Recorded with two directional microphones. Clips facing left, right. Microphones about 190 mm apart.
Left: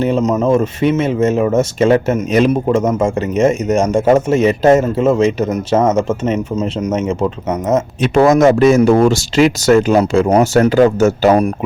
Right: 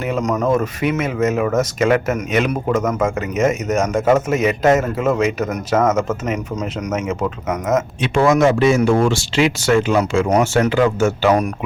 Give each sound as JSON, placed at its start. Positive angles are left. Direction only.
{"t": 0.0, "sound": "a man's voice", "side_deg": 25}